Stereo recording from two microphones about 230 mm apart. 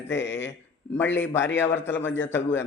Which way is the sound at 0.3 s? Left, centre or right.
Left.